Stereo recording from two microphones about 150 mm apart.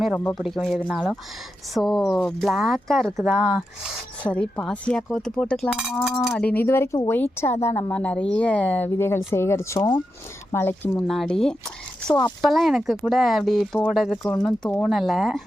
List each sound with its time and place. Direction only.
0.0 s speech: 10° left (ahead or behind)
4.2 s speech: 10° left (ahead or behind)
6.4 s speech: 15° left (ahead or behind)
11.0 s speech: centre (ahead or behind)